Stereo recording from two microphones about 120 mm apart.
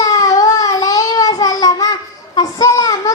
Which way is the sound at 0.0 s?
30° left (ahead or behind).